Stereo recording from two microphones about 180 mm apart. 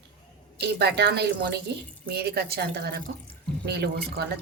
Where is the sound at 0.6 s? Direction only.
65° right (ahead or behind).